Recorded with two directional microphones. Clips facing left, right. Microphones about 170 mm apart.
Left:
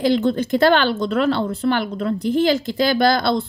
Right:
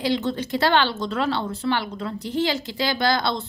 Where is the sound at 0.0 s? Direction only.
50° left (ahead or behind).